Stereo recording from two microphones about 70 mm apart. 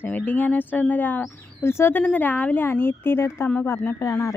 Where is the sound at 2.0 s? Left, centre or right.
Left.